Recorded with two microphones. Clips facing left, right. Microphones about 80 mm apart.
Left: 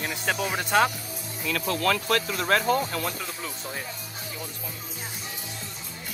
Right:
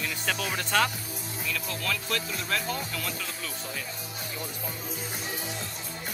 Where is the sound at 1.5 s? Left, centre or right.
Left.